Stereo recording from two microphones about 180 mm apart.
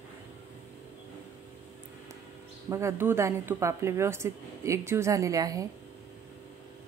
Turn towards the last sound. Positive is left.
turn(degrees=-20)  # may be behind; listen again after turning